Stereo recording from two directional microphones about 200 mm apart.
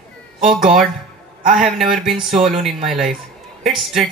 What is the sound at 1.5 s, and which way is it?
Speech, centre (ahead or behind).